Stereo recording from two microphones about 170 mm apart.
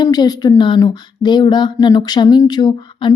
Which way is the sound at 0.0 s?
25° left (ahead or behind).